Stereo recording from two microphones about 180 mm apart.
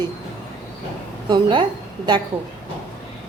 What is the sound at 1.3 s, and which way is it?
Speech, 25° right (ahead or behind).